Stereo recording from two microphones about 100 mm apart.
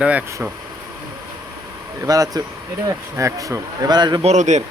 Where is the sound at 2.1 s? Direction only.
40° right (ahead or behind).